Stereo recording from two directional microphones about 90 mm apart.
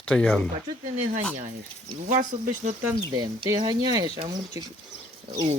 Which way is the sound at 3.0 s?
45° right (ahead or behind).